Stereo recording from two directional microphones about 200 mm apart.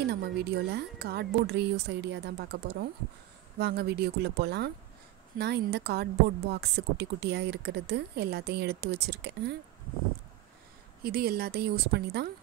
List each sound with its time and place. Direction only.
0.1 s a woman's voice: 55° right (ahead or behind)
11.1 s speech: 50° right (ahead or behind)